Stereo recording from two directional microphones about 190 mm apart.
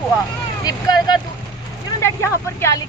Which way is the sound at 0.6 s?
20° left (ahead or behind).